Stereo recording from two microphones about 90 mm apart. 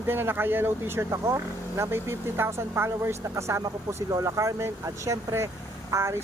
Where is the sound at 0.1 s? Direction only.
25° right (ahead or behind).